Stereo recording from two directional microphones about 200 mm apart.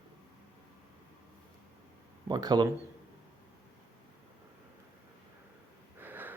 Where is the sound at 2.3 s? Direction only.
20° right (ahead or behind).